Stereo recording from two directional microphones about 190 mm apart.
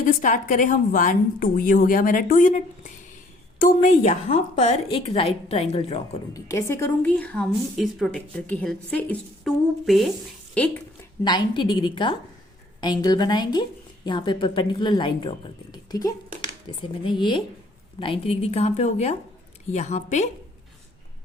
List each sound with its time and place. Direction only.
0.0 s a woman's voice: 45° left (ahead or behind)
6.3 s a woman's voice: 15° left (ahead or behind)
11.2 s a woman's voice: 25° left (ahead or behind); by 20.2 s 40° left (ahead or behind)